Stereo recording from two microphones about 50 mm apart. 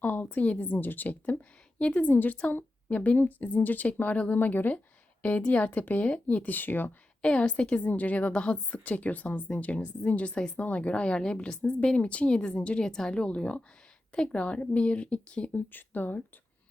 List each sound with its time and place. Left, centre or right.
0.0 s a sound: left
1.9 s a woman's voice: left
7.2 s a woman's voice: left
15.7 s speech: left